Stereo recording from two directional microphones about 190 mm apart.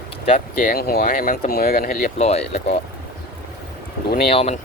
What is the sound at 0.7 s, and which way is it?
Speech, 50° left (ahead or behind).